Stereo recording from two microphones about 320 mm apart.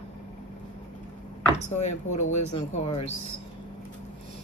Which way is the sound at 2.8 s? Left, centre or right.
Left.